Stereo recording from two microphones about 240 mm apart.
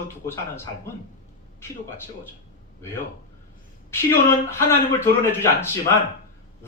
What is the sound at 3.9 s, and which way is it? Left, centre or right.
Speech, centre.